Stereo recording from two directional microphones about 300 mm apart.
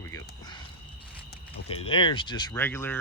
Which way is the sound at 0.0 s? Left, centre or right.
Centre.